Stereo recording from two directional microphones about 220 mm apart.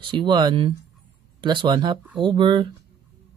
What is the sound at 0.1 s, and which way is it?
Speech, 20° right (ahead or behind).